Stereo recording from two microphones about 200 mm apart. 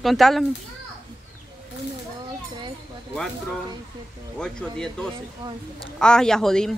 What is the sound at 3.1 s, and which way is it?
Speech, centre (ahead or behind).